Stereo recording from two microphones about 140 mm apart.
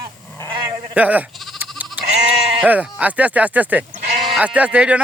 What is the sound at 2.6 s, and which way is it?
Speech, 10° right (ahead or behind).